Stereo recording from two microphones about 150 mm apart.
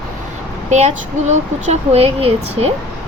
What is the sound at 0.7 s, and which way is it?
Speech, 50° right (ahead or behind).